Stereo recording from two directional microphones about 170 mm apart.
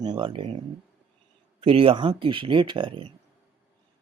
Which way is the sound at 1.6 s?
35° right (ahead or behind).